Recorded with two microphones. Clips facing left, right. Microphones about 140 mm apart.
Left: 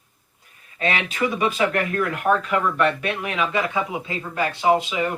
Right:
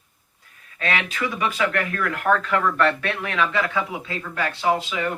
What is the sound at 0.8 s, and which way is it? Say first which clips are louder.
Speech: left 2 dB; 20° left (ahead or behind).